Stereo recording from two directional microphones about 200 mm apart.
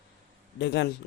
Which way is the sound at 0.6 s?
60° left (ahead or behind).